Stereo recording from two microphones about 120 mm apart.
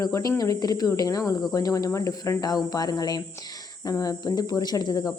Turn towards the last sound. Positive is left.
turn(degrees=35)  # may be behind; listen again after turning